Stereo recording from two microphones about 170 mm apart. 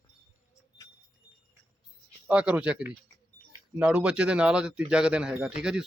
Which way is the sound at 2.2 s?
5° right (ahead or behind).